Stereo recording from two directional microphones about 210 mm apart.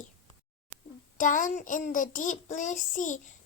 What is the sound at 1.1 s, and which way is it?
A child's voice, 40° left (ahead or behind).